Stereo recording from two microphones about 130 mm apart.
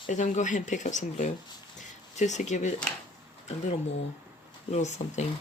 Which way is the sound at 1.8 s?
65° left (ahead or behind).